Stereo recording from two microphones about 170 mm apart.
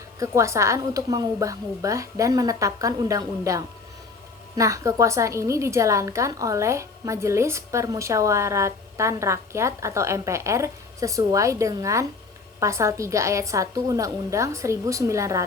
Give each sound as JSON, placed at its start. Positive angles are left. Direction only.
{"t": 0.2, "sound": "a woman's voice", "side_deg": -15}